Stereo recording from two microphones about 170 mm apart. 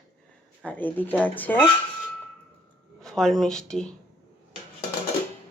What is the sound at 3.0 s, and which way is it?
Speech, 5° left (ahead or behind).